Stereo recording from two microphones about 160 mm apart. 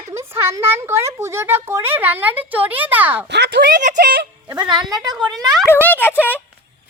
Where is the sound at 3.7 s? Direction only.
55° right (ahead or behind).